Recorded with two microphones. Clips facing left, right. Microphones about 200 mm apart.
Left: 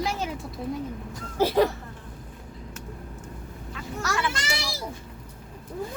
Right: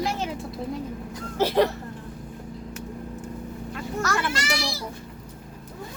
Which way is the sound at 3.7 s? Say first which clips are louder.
Right 3 dB; 50° right (ahead or behind).